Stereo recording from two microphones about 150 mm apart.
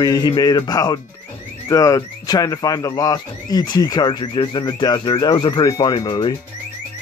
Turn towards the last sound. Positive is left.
turn(degrees=30)  # may be behind; listen again after turning